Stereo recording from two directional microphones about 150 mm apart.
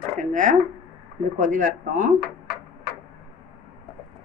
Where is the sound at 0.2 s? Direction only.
55° right (ahead or behind).